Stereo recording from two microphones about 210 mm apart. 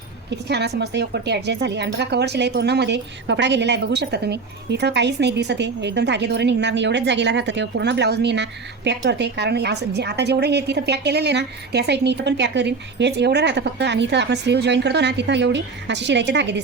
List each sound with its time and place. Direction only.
0.3 s speech: 55° right (ahead or behind)